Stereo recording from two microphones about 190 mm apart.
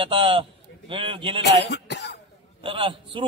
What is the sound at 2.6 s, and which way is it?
Speech, 25° right (ahead or behind).